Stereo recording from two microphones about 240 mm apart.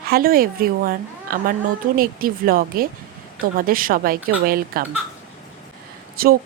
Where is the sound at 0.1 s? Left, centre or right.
Right.